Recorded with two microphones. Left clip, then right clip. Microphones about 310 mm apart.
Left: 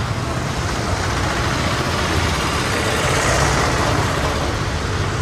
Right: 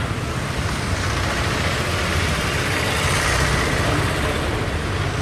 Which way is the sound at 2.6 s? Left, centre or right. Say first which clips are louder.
Left 2 dB; left.